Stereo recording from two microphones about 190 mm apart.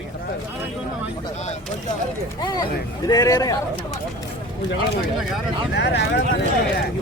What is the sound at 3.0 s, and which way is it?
Speech, 20° left (ahead or behind).